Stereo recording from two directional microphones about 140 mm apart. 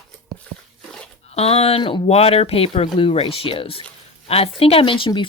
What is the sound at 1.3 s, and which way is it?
Speech, 45° left (ahead or behind).